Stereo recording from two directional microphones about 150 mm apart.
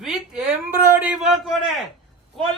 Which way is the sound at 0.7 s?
15° right (ahead or behind).